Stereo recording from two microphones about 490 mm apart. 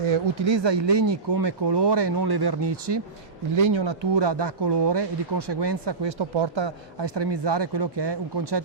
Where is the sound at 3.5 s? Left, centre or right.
Right.